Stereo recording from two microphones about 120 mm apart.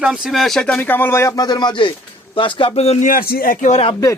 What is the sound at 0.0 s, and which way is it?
Speech, 5° right (ahead or behind).